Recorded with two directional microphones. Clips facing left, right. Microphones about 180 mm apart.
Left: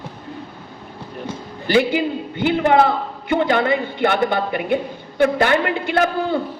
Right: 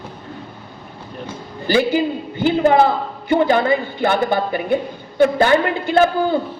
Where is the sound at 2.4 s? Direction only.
35° right (ahead or behind).